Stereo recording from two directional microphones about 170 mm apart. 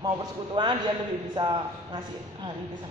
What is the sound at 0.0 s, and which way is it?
A man's voice, 25° right (ahead or behind).